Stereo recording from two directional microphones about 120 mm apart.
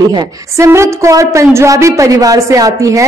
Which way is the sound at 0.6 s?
25° right (ahead or behind).